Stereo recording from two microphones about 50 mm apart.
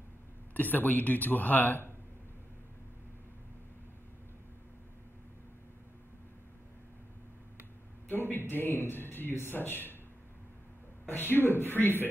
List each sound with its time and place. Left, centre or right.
0.6 s speech: left
8.1 s a man's voice: left
11.1 s a man's voice: left